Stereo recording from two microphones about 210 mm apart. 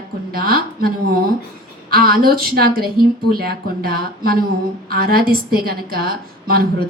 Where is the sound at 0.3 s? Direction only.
45° right (ahead or behind).